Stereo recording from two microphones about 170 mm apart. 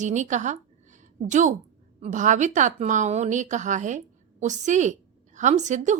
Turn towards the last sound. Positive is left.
turn(degrees=-45)  # may be behind; listen again after turning